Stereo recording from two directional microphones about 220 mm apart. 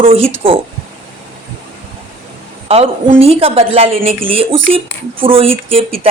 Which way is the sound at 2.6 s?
25° right (ahead or behind).